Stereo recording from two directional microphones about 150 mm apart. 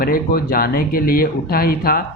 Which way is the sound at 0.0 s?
75° left (ahead or behind).